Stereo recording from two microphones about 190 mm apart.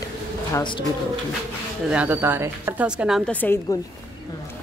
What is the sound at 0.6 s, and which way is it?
Speech, 25° left (ahead or behind).